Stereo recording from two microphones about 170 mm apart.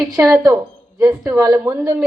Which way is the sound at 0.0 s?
15° right (ahead or behind).